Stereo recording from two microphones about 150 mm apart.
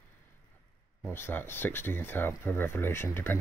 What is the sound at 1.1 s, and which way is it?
Speech, 15° left (ahead or behind).